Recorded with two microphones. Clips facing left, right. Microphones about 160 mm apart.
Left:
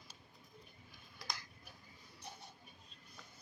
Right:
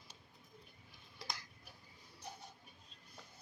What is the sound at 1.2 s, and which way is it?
Tick-tock, 30° right (ahead or behind).